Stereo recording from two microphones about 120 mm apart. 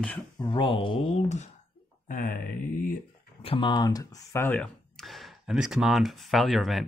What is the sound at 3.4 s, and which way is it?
Speech, 45° left (ahead or behind).